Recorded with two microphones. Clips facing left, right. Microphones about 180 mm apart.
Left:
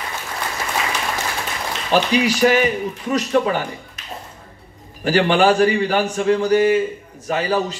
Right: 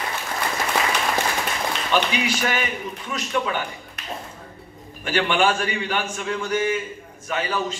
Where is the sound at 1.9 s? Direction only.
35° left (ahead or behind).